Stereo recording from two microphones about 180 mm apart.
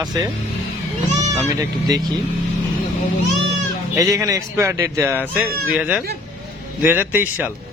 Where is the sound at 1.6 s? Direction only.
20° right (ahead or behind).